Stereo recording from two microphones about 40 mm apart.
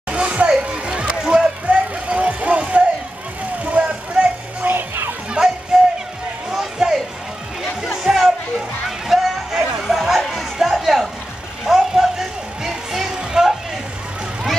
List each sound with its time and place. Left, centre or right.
0.1 s children playing: right
0.5 s music: right
3.8 s vehicle: right
4.6 s music: right
5.4 s music: right
6.8 s a sound: centre
8.0 s music: centre
10.6 s a sound: centre
11.6 s music: centre